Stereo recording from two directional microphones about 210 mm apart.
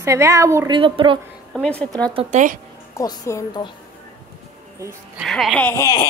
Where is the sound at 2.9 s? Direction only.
15° left (ahead or behind).